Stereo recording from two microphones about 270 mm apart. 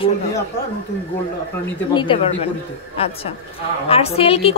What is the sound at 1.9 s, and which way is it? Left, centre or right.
Speech, centre.